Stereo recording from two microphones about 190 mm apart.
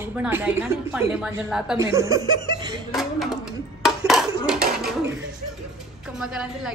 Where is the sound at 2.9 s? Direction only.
Centre (ahead or behind).